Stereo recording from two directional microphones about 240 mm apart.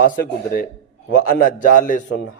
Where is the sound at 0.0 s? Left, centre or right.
Left.